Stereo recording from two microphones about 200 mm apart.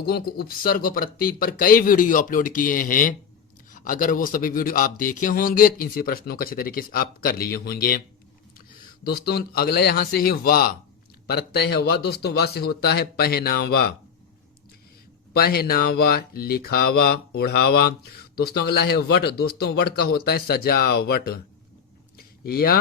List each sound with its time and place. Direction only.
0.0 s speech: 50° left (ahead or behind)
9.0 s speech: 55° left (ahead or behind)
15.3 s speech: 50° left (ahead or behind)
22.2 s a sound: 50° left (ahead or behind)